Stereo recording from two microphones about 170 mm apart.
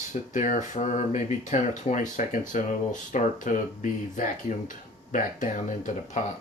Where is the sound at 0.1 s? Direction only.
50° left (ahead or behind).